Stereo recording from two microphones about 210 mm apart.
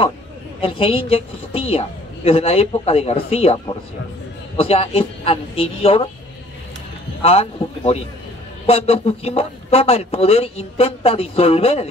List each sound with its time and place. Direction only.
0.6 s a man's voice: 25° left (ahead or behind)
7.2 s a man's voice: 30° left (ahead or behind)